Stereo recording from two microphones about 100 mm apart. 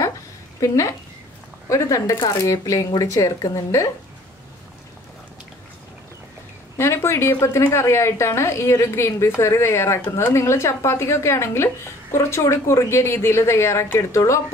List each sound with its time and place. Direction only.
0.6 s speech: 35° left (ahead or behind)
6.8 s a sound: 25° left (ahead or behind)
7.3 s a woman's voice: 30° left (ahead or behind)